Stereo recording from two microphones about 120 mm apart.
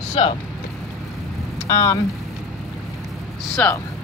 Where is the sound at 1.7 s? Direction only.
25° left (ahead or behind).